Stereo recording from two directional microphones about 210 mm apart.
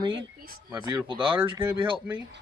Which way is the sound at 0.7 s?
15° right (ahead or behind).